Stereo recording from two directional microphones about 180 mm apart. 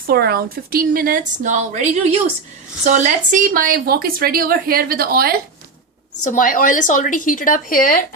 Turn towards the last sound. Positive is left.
turn(degrees=50)  # may be behind; listen again after turning